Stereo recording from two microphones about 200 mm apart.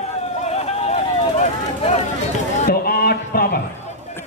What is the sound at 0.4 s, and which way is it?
Run, 30° left (ahead or behind).